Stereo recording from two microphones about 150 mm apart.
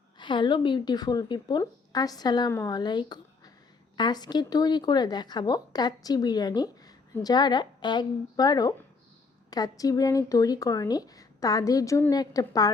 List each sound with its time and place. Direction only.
0.2 s a woman's voice: 30° left (ahead or behind)